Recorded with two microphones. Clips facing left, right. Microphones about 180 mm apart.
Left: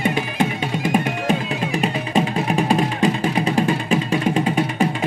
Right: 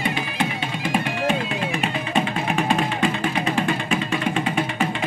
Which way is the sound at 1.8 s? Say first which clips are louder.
Left 4 dB; 35° left (ahead or behind).